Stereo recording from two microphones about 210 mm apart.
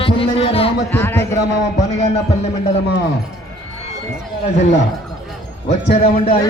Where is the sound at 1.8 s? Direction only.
30° left (ahead or behind).